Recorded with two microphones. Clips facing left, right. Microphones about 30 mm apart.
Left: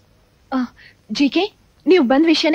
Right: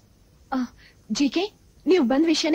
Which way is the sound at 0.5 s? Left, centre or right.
Left.